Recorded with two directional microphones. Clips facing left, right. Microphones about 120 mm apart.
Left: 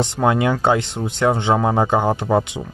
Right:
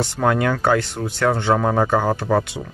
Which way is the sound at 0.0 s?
20° left (ahead or behind).